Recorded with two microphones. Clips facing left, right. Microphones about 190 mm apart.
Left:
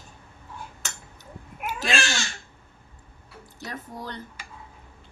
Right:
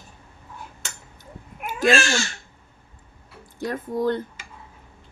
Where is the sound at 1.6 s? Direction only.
50° right (ahead or behind).